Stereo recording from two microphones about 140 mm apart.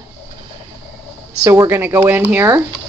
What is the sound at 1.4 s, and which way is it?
Speech, 20° right (ahead or behind).